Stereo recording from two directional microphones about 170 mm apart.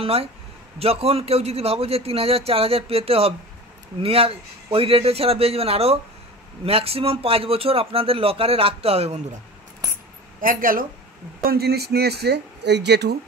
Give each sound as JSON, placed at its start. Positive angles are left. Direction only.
{"t": 0.0, "sound": "speech", "side_deg": -35}
{"t": 10.4, "sound": "a woman's voice", "side_deg": -55}
{"t": 11.4, "sound": "speech", "side_deg": -70}